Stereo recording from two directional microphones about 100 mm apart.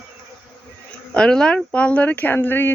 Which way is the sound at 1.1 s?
10° left (ahead or behind).